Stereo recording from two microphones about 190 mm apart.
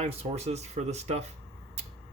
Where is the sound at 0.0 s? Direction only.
35° right (ahead or behind).